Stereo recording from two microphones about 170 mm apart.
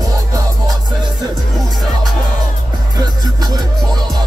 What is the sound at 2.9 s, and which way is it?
Music, 25° right (ahead or behind).